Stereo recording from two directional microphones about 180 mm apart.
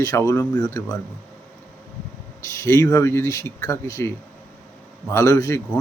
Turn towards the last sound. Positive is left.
turn(degrees=20)  # may be behind; listen again after turning